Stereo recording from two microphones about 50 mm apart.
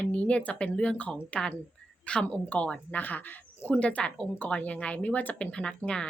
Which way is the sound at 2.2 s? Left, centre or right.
Left.